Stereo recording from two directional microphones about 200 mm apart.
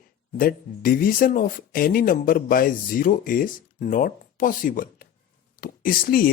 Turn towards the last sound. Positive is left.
turn(degrees=45)  # may be behind; listen again after turning